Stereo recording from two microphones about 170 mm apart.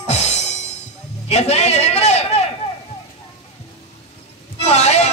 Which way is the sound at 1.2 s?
40° left (ahead or behind).